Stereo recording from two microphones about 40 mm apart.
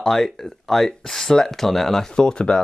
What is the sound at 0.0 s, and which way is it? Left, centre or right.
Speech, centre.